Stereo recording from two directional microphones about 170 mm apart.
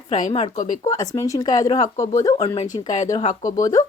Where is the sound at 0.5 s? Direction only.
50° left (ahead or behind).